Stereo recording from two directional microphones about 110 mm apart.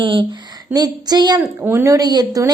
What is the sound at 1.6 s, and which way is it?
Speech, 20° right (ahead or behind).